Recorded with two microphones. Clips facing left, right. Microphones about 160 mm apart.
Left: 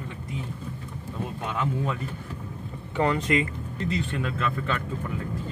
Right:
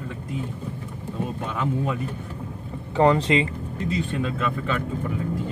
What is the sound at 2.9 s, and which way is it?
Speech, 35° right (ahead or behind).